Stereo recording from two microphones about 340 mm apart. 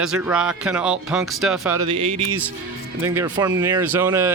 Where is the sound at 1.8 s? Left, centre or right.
Centre.